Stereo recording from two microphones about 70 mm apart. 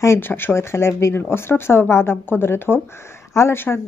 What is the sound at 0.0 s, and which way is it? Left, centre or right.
Speech, left.